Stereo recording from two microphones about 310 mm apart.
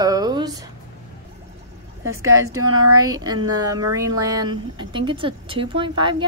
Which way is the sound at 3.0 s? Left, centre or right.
Centre.